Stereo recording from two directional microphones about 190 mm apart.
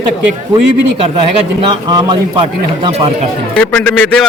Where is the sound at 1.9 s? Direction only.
20° right (ahead or behind).